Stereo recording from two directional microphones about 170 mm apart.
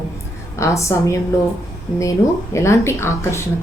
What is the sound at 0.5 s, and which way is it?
A woman's voice, 15° left (ahead or behind).